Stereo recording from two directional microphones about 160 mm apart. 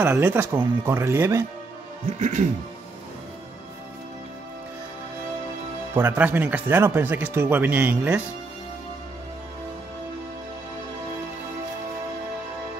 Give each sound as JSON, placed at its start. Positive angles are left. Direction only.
{"t": 0.0, "sound": "speech", "side_deg": -10}
{"t": 2.1, "sound": "speech", "side_deg": -50}
{"t": 5.9, "sound": "speech", "side_deg": -10}